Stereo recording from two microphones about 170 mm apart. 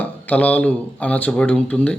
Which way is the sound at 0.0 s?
10° left (ahead or behind).